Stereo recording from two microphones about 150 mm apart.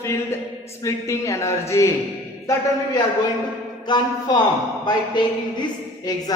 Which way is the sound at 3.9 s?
25° left (ahead or behind).